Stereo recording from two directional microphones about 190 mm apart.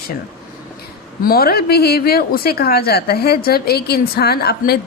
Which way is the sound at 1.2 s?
50° left (ahead or behind).